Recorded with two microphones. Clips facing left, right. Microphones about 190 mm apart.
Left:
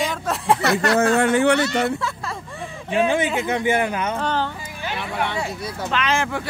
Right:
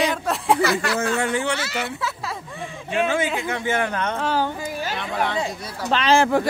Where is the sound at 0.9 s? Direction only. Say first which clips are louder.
Left 6 dB; 55° left (ahead or behind).